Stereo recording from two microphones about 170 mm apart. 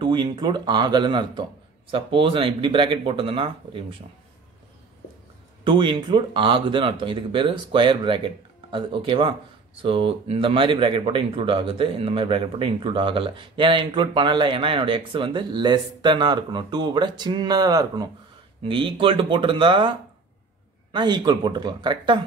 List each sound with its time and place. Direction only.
0.0 s speech: 25° right (ahead or behind)
5.6 s speech: 30° right (ahead or behind)